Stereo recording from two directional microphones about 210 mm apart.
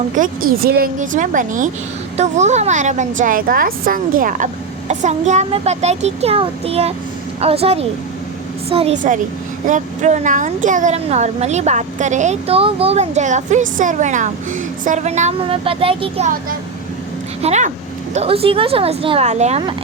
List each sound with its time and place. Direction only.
0.2 s speech: 45° right (ahead or behind); by 16.3 s 25° right (ahead or behind)
17.4 s speech: 35° right (ahead or behind)